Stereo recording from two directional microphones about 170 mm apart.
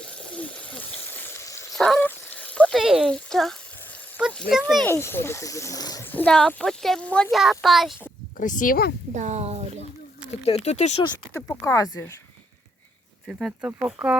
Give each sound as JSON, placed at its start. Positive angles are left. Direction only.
{"t": 0.3, "sound": "a sound", "side_deg": 10}
{"t": 1.7, "sound": "duck", "side_deg": 0}
{"t": 2.0, "sound": "fowl", "side_deg": 10}
{"t": 4.5, "sound": "speech", "side_deg": 60}
{"t": 4.9, "sound": "speech", "side_deg": 15}
{"t": 6.1, "sound": "speech", "side_deg": 10}
{"t": 8.4, "sound": "speech", "side_deg": 50}
{"t": 9.1, "sound": "speech", "side_deg": -45}
{"t": 10.2, "sound": "speech", "side_deg": 35}
{"t": 11.3, "sound": "speech", "side_deg": 15}
{"t": 13.2, "sound": "speech", "side_deg": -5}